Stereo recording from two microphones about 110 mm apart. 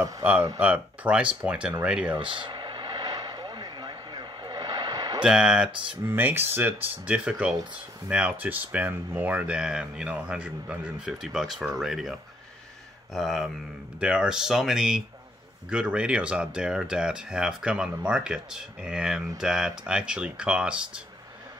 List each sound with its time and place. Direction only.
0.2 s speech: 15° right (ahead or behind)
2.1 s vehicle: 45° right (ahead or behind)
5.2 s speech: 10° right (ahead or behind)
6.0 s speech: 20° right (ahead or behind)